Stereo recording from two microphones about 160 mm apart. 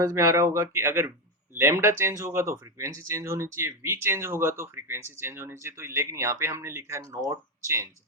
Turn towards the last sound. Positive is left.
turn(degrees=-15)  # may be behind; listen again after turning